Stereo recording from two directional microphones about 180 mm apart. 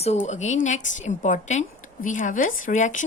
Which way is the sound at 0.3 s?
40° left (ahead or behind).